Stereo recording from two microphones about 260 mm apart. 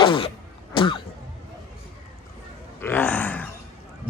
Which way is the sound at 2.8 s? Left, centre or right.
Centre.